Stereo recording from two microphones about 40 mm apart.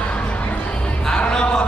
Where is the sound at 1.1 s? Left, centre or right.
Left.